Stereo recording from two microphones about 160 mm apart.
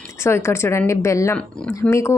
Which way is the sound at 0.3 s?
15° left (ahead or behind).